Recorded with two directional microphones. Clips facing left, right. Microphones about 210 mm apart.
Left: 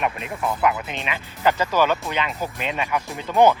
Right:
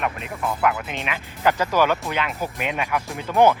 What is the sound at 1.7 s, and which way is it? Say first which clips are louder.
Speech: even; 10° right (ahead or behind).